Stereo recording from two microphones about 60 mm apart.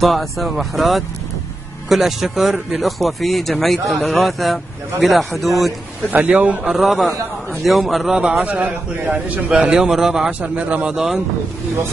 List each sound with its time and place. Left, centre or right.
0.0 s speech: centre
6.0 s a man's voice: right
6.7 s speech: centre
8.2 s a man's voice: centre
9.5 s a man's voice: centre
10.2 s a man's voice: centre